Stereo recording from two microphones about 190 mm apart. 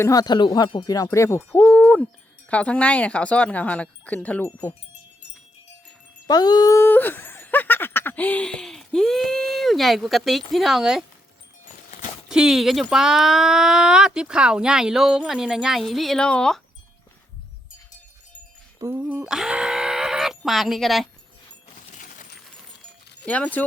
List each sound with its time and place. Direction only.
0.0 s speech: 20° left (ahead or behind)
6.2 s speech: 20° left (ahead or behind); by 11.0 s centre (ahead or behind)
12.3 s speech: 5° right (ahead or behind)
18.8 s speech: 10° right (ahead or behind)
21.9 s a sound: 45° left (ahead or behind)
23.2 s speech: 5° left (ahead or behind)